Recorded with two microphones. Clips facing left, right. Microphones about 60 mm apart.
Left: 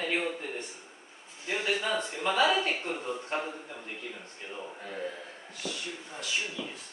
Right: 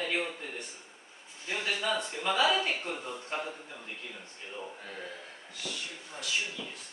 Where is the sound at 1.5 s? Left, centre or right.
Left.